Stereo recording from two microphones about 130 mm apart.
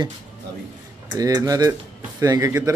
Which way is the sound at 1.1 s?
30° right (ahead or behind).